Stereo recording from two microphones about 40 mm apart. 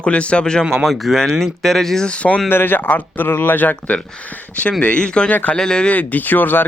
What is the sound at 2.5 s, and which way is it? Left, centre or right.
Speech, left.